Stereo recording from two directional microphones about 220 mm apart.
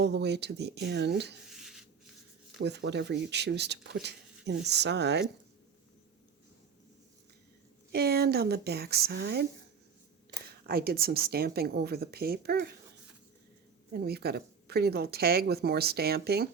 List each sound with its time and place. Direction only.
0.0 s speech: 50° right (ahead or behind)
1.5 s a sound: centre (ahead or behind)
2.6 s speech: 55° right (ahead or behind)
7.9 s speech: 45° right (ahead or behind)
10.7 s speech: 45° right (ahead or behind)
13.9 s speech: 45° right (ahead or behind)